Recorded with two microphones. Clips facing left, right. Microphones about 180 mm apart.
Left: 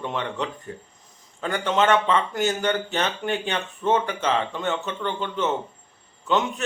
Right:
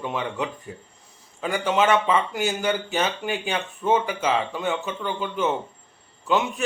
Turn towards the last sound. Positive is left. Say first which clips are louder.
# even
turn(degrees=-5)  # may be behind; listen again after turning